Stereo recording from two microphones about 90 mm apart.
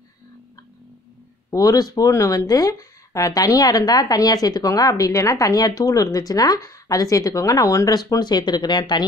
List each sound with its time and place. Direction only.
1.5 s speech: 40° left (ahead or behind)